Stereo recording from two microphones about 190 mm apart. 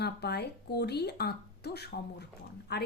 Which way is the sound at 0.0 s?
60° left (ahead or behind).